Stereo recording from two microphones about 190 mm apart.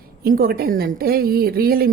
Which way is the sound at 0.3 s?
50° right (ahead or behind).